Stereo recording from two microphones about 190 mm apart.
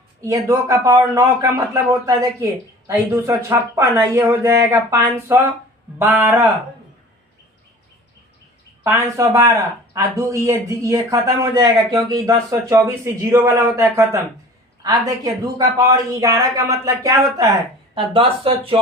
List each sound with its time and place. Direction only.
0.2 s a man's voice: 15° right (ahead or behind)
8.8 s a man's voice: 15° right (ahead or behind)
17.9 s speech: 30° right (ahead or behind)